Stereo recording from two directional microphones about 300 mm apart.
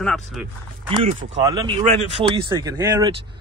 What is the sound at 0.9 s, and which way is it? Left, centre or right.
Speech, centre.